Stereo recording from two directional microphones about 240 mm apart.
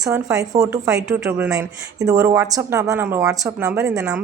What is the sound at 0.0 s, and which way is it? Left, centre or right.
Speech, centre.